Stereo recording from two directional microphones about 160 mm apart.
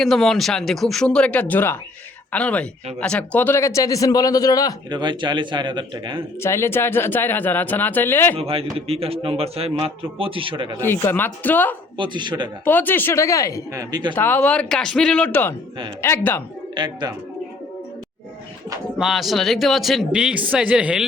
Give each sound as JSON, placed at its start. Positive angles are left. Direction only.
{"t": 0.0, "sound": "speech", "side_deg": 0}
{"t": 4.9, "sound": "a man's voice", "side_deg": -30}
{"t": 6.4, "sound": "speech", "side_deg": 15}
{"t": 8.4, "sound": "a man's voice", "side_deg": -35}
{"t": 10.6, "sound": "a man's voice", "side_deg": -25}
{"t": 11.1, "sound": "speech", "side_deg": 10}
{"t": 11.9, "sound": "a man's voice", "side_deg": -30}
{"t": 12.6, "sound": "speech", "side_deg": 10}
{"t": 13.7, "sound": "a man's voice", "side_deg": -25}
{"t": 14.2, "sound": "speech", "side_deg": 10}
{"t": 16.7, "sound": "a man's voice", "side_deg": -30}
{"t": 18.9, "sound": "speech", "side_deg": 0}